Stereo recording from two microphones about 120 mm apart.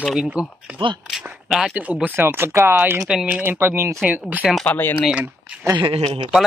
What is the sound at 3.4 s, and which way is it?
Speech, 20° right (ahead or behind).